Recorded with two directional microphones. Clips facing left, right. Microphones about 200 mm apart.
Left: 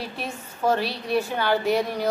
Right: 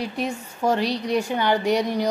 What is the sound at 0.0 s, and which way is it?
A woman's voice, 15° right (ahead or behind).